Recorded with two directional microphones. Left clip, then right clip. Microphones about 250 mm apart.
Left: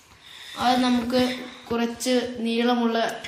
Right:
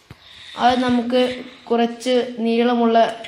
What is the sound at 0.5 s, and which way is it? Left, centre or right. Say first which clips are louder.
Speech: right 5 dB; right.